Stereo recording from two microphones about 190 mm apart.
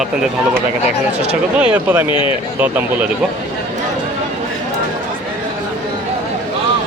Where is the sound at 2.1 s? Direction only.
25° left (ahead or behind).